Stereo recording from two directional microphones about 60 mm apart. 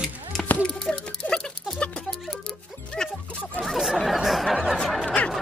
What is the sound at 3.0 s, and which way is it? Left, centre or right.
Dog, centre.